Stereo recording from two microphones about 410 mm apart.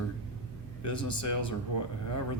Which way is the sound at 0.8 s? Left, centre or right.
Left.